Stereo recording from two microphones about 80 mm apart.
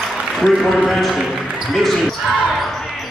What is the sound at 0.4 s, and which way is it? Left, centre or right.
Speech, centre.